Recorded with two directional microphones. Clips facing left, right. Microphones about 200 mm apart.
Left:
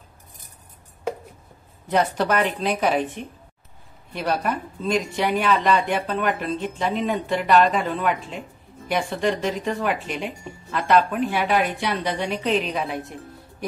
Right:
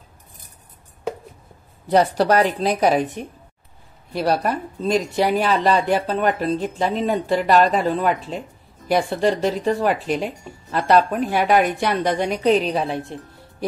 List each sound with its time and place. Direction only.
1.9 s speech: 35° right (ahead or behind)